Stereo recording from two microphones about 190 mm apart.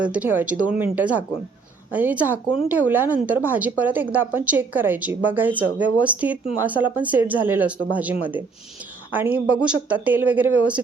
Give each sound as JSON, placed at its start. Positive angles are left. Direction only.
{"t": 0.0, "sound": "a woman's voice", "side_deg": -10}